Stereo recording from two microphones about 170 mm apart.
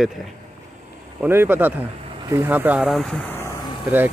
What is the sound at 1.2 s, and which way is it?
A man's voice, 10° right (ahead or behind).